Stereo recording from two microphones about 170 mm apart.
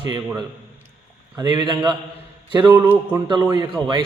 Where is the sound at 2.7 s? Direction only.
15° right (ahead or behind).